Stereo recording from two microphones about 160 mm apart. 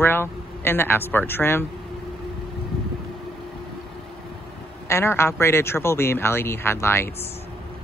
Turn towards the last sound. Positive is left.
turn(degrees=15)  # may be behind; listen again after turning